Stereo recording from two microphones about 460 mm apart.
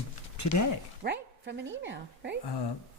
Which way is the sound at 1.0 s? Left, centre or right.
Right.